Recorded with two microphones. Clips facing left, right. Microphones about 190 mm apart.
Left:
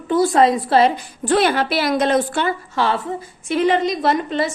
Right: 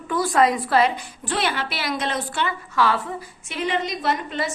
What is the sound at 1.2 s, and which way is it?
A woman's voice, 45° left (ahead or behind).